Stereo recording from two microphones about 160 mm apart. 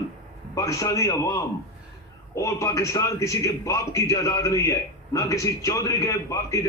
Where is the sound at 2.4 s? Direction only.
20° left (ahead or behind).